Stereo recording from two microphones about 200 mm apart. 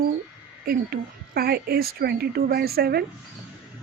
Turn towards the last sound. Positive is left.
turn(degrees=-50)  # may be behind; listen again after turning